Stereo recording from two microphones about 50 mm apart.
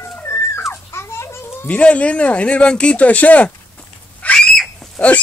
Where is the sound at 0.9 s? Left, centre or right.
Left.